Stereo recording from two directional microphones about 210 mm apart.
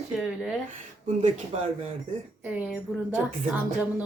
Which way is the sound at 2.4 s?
5° right (ahead or behind).